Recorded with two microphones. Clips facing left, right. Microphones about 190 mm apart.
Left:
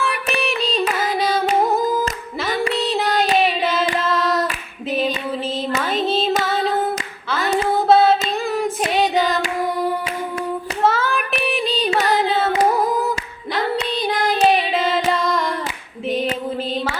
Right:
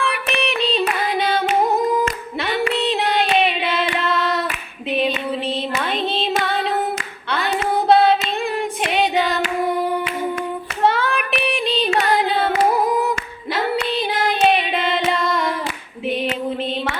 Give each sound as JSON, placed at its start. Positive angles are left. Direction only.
{"t": 0.0, "sound": "music", "side_deg": 0}
{"t": 1.7, "sound": "singing", "side_deg": 0}
{"t": 2.5, "sound": "a sound", "side_deg": 40}
{"t": 3.8, "sound": "singing", "side_deg": 0}
{"t": 7.9, "sound": "female singing", "side_deg": 0}
{"t": 10.8, "sound": "child singing", "side_deg": 0}